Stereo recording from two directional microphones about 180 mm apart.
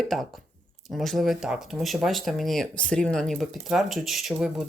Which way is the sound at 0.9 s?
Centre (ahead or behind).